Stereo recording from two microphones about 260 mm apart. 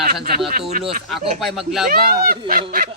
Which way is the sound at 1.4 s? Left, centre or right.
Centre.